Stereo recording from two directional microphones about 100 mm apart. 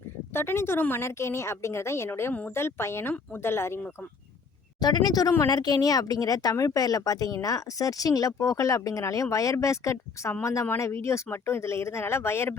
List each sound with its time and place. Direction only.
0.3 s speech: 25° left (ahead or behind)
4.8 s speech: 45° left (ahead or behind); by 12.5 s 25° left (ahead or behind)